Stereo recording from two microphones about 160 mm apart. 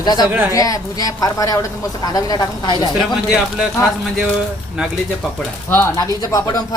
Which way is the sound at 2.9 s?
5° right (ahead or behind).